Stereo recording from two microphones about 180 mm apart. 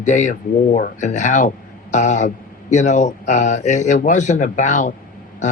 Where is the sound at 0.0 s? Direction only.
40° left (ahead or behind).